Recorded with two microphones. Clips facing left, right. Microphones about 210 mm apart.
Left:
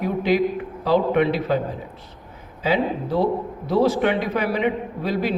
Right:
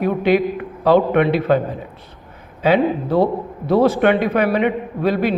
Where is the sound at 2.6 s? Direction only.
60° right (ahead or behind).